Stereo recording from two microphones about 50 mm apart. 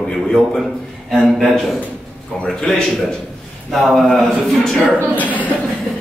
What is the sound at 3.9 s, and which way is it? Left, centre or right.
Speech, centre.